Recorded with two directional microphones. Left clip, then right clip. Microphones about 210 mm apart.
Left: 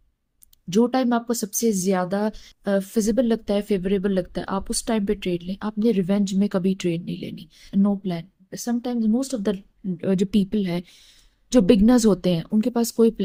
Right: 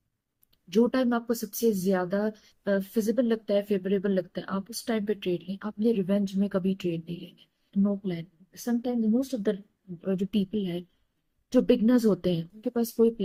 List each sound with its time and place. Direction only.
0.7 s speech: 55° left (ahead or behind)